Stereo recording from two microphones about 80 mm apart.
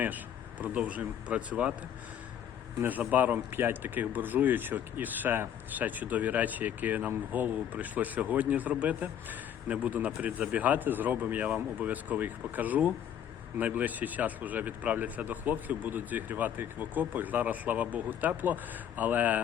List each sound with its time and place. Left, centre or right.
0.6 s speech: centre
3.0 s speech: centre